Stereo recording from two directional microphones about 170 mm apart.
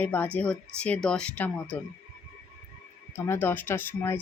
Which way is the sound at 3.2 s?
10° left (ahead or behind).